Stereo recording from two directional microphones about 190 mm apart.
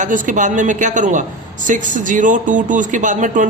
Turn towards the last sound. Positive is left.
turn(degrees=-40)  # may be behind; listen again after turning